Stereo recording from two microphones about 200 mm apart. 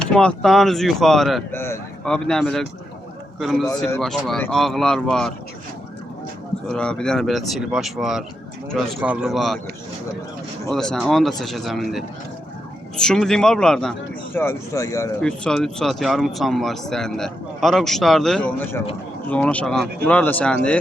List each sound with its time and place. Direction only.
0.1 s speech: 5° left (ahead or behind)
1.5 s speech: 10° left (ahead or behind)
4.0 s speech: centre (ahead or behind)
6.7 s speech: 5° left (ahead or behind)
10.7 s speech: centre (ahead or behind)
14.3 s speech: 15° left (ahead or behind)
15.2 s speech: 5° left (ahead or behind)